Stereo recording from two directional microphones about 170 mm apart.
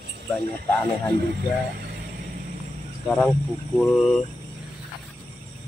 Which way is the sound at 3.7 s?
5° left (ahead or behind).